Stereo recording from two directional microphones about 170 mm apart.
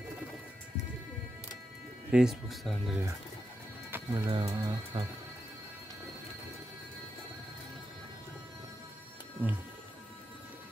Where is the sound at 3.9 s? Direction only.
10° right (ahead or behind).